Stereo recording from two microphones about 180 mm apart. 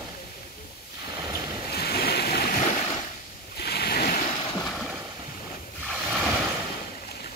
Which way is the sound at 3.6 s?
60° left (ahead or behind).